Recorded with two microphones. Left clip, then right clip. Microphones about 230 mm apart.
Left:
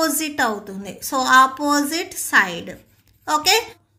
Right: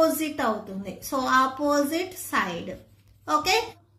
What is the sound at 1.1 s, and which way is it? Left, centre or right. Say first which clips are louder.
Speech: left 8 dB; left.